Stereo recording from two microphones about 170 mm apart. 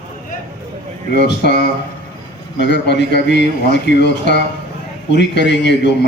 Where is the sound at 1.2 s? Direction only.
80° left.